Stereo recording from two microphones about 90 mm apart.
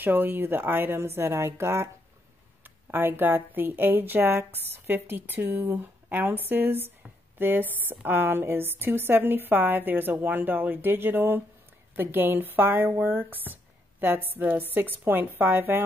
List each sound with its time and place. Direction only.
0.0 s speech: 20° right (ahead or behind)